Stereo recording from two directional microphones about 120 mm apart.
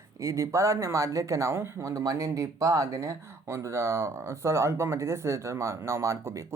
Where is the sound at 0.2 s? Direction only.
25° right (ahead or behind).